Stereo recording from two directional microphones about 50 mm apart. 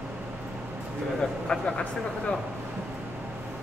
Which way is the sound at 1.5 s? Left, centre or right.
Centre.